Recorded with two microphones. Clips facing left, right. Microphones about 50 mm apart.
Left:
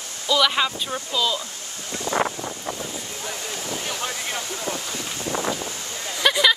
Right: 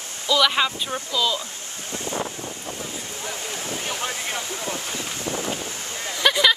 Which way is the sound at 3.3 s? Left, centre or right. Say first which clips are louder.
Even; right.